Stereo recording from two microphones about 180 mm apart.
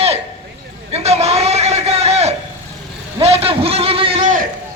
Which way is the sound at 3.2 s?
35° right (ahead or behind).